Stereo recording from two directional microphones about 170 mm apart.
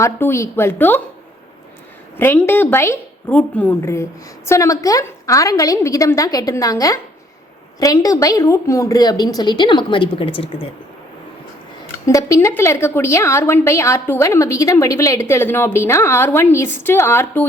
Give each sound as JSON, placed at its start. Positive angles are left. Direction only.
{"t": 0.0, "sound": "a woman's voice", "side_deg": 15}
{"t": 2.1, "sound": "a woman's voice", "side_deg": 15}
{"t": 12.0, "sound": "a woman's voice", "side_deg": 20}